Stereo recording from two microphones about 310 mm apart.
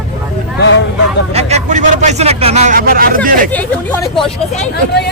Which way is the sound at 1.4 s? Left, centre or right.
Right.